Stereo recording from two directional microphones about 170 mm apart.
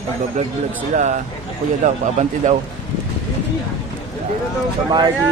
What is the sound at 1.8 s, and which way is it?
Speech, 45° right (ahead or behind).